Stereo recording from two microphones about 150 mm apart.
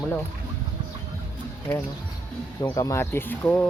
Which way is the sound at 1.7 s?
10° left (ahead or behind).